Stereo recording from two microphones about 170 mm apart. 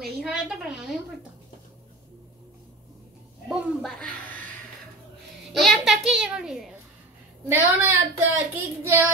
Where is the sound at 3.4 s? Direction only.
Centre (ahead or behind).